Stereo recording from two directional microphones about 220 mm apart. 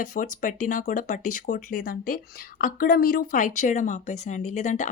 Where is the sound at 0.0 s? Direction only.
35° left (ahead or behind).